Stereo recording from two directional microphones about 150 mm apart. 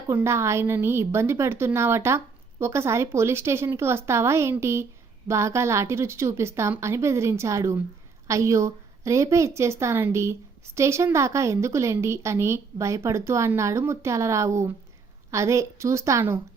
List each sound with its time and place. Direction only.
0.1 s a woman's voice: 15° right (ahead or behind)